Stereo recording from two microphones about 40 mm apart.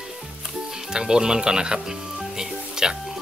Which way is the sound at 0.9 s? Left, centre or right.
Centre.